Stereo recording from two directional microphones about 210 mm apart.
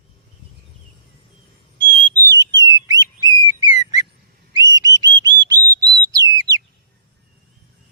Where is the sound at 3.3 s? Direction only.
20° right (ahead or behind).